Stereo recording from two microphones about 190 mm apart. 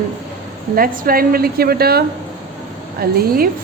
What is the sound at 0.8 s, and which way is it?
A woman's voice, 50° right (ahead or behind).